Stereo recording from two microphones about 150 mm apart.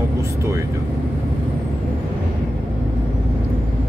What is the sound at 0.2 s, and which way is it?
Speech, 20° right (ahead or behind).